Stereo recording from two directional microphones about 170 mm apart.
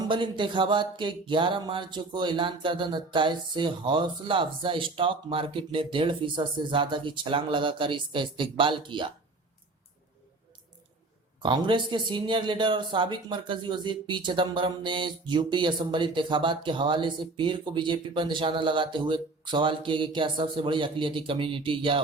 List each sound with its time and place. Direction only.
0.1 s speech: 30° right (ahead or behind)
11.4 s speech: 30° right (ahead or behind)